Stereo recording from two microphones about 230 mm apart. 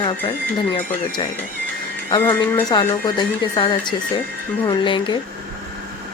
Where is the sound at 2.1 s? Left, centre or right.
Centre.